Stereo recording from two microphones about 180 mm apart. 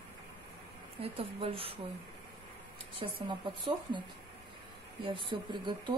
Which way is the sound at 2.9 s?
25° right (ahead or behind).